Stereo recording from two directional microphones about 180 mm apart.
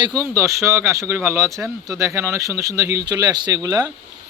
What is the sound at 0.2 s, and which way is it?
A man's voice, 15° right (ahead or behind).